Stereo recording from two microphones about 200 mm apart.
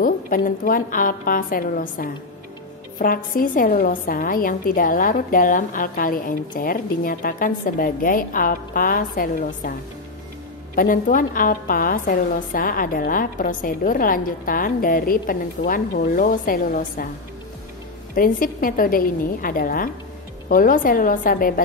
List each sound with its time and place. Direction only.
0.0 s a woman's voice: 45° left (ahead or behind)
10.8 s a woman's voice: 45° left (ahead or behind)
18.1 s a woman's voice: 45° left (ahead or behind)